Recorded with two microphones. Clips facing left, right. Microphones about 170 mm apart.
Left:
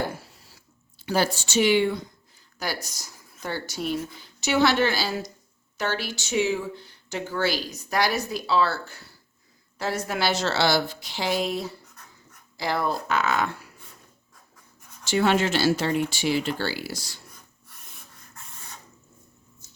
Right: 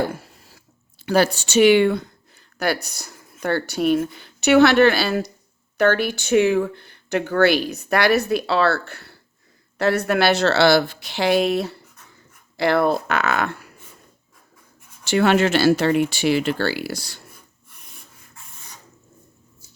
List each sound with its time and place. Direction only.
0.3 s a sound: 55° right (ahead or behind)
2.6 s speech: 65° right (ahead or behind)
15.0 s speech: 65° right (ahead or behind)